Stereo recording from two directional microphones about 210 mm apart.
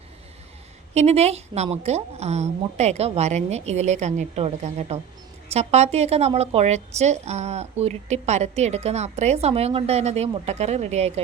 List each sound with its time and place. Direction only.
0.9 s a woman's voice: 30° right (ahead or behind)